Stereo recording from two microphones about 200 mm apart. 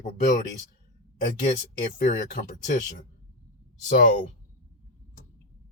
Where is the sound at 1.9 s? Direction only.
45° left (ahead or behind).